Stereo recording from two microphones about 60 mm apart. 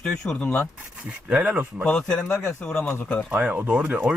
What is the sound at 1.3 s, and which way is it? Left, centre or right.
Speech, right.